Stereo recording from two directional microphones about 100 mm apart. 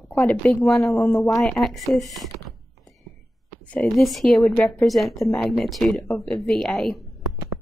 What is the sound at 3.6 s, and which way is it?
Speech, 15° left (ahead or behind).